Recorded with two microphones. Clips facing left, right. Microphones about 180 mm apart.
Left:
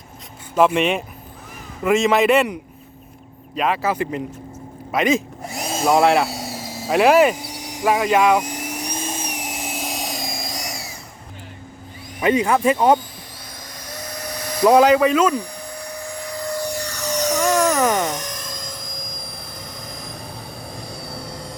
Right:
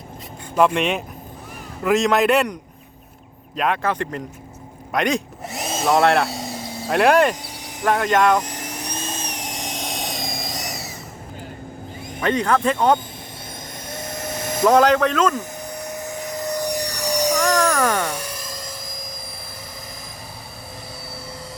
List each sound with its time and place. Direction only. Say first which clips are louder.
0.5 s speech: left 1 dB; 5° left (ahead or behind)
4.9 s drill: left 2 dB; centre (ahead or behind)
7.8 s vehicle: left 1 dB; 5° left (ahead or behind)
12.2 s speech: left 2 dB; 10° left (ahead or behind)
13.8 s vehicle: right 2 dB; 25° right (ahead or behind)
14.7 s speech: left 2 dB; 10° left (ahead or behind)
15.4 s aircraft: even; 20° right (ahead or behind)
17.4 s a sound: left 4 dB; 10° left (ahead or behind)
18.1 s a sound: left 1 dB; 10° right (ahead or behind)
21.1 s vehicle: left 3 dB; 5° right (ahead or behind)